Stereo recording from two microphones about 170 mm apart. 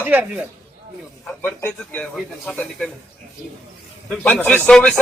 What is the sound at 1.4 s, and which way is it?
A man's voice, 10° left (ahead or behind).